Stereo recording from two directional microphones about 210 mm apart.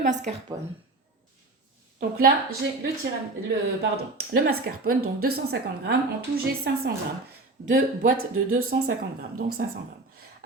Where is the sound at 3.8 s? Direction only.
50° right (ahead or behind).